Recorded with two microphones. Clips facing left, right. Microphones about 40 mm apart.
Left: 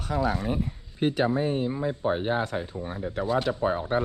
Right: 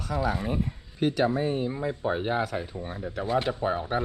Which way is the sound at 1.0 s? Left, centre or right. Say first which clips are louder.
Even; left.